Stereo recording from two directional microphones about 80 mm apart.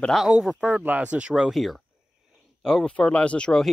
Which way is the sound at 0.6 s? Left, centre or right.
Centre.